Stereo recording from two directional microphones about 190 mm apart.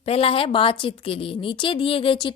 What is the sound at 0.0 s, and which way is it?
A woman's voice, 30° left (ahead or behind).